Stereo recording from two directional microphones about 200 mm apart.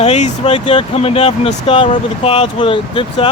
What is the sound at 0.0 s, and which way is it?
Speech, 30° left (ahead or behind).